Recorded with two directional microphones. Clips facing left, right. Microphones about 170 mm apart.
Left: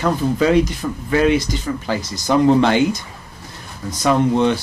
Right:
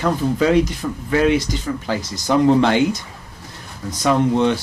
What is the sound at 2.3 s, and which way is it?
Speech, 30° left (ahead or behind).